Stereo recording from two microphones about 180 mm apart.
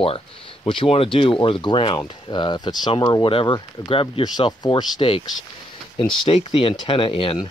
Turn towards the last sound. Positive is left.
turn(degrees=30)  # may be behind; listen again after turning